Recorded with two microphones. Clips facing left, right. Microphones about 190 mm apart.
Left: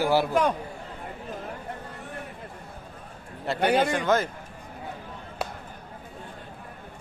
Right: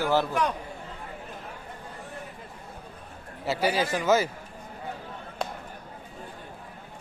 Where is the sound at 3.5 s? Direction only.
5° right (ahead or behind).